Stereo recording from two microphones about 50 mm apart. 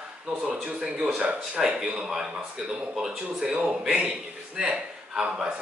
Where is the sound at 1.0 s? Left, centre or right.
Centre.